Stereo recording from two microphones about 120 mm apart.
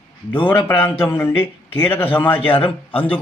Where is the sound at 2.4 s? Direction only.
50° left (ahead or behind).